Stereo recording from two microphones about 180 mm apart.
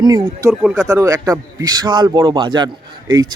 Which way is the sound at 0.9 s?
20° right (ahead or behind).